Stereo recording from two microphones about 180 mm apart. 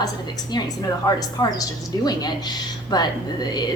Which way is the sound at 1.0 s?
20° left (ahead or behind).